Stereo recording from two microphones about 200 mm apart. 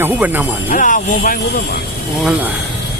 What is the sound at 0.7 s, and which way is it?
Speech, 40° left (ahead or behind).